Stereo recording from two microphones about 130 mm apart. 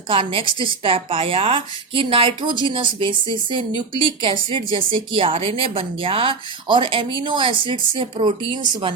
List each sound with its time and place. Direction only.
0.1 s a woman's voice: 40° right (ahead or behind)